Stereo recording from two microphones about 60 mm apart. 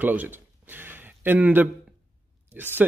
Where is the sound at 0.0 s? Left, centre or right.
Right.